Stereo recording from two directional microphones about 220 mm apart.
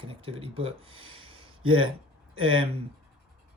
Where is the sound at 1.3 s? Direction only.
25° right (ahead or behind).